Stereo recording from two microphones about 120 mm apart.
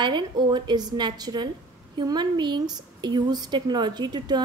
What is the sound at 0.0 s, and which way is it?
Speech, 40° right (ahead or behind).